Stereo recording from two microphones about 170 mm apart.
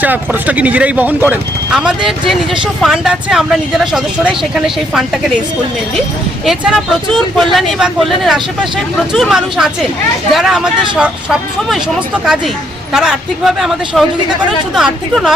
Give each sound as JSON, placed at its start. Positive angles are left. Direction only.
{"t": 0.0, "sound": "speech", "side_deg": -10}
{"t": 6.4, "sound": "speech", "side_deg": 0}
{"t": 12.9, "sound": "speech", "side_deg": -5}